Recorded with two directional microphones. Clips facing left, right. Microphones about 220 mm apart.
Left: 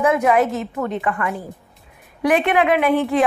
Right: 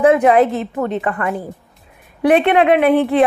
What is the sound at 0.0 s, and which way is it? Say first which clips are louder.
A woman's voice: right 5 dB; 30° right (ahead or behind).